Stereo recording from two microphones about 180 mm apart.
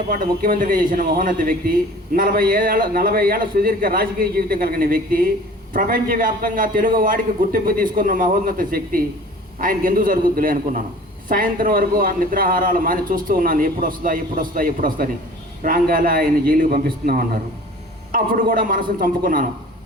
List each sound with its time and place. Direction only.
0.1 s a man's voice: 55° right (ahead or behind)